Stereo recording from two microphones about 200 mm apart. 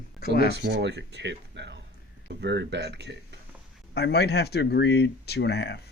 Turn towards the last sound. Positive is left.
turn(degrees=55)  # may be behind; listen again after turning